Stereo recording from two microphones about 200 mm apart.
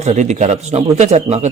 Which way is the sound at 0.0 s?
35° right (ahead or behind).